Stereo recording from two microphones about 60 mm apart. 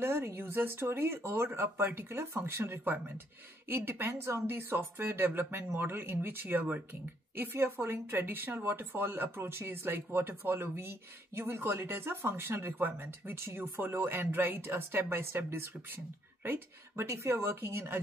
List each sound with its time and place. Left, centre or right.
0.0 s a woman's voice: right
4.1 s a woman's voice: right